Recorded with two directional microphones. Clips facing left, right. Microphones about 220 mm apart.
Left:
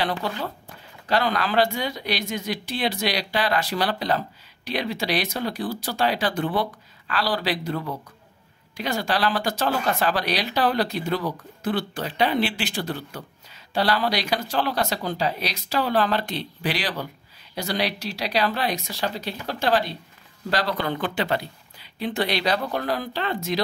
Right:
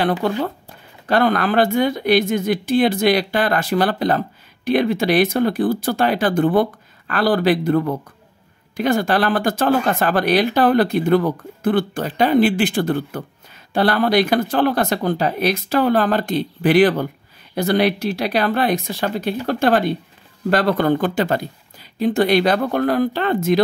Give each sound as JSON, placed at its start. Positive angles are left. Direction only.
{"t": 0.0, "sound": "speech", "side_deg": -55}